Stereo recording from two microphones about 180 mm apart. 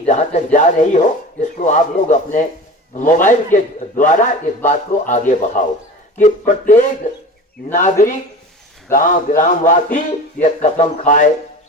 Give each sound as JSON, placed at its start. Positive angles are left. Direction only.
{"t": 0.0, "sound": "speech", "side_deg": 40}